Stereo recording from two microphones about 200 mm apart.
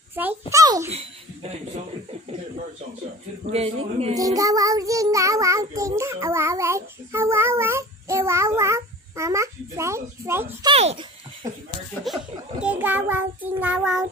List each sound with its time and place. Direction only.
0.1 s child singing: 10° right (ahead or behind)
0.8 s speech: 30° right (ahead or behind)
3.5 s speech: 30° right (ahead or behind)
4.1 s child singing: 15° right (ahead or behind)
10.7 s speech: 30° right (ahead or behind)
11.9 s child singing: centre (ahead or behind)